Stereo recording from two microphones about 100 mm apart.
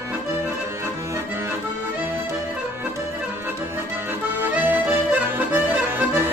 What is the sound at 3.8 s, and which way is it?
Accordion, 20° right (ahead or behind).